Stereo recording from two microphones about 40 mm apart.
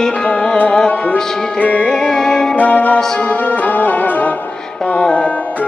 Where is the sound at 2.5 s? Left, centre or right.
Left.